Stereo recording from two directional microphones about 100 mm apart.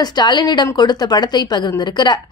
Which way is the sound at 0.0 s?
45° left (ahead or behind).